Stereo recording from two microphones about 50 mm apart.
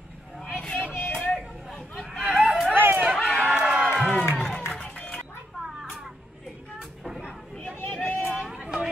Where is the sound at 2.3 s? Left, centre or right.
Right.